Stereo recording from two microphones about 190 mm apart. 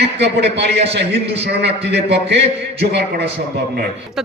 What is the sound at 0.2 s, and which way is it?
A man's voice, 65° right (ahead or behind).